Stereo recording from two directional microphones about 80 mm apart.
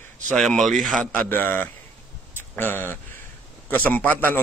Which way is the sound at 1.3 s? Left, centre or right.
Left.